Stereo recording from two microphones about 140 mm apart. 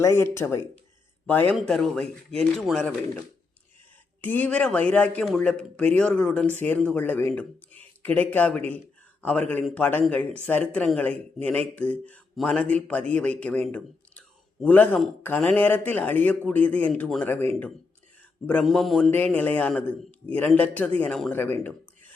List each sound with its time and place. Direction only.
0.0 s speech: 20° left (ahead or behind); by 2.9 s 5° left (ahead or behind)
4.2 s speech: 10° left (ahead or behind)
13.7 s a sound: 10° left (ahead or behind)
15.2 s speech: 10° left (ahead or behind)
19.1 s speech: 10° left (ahead or behind)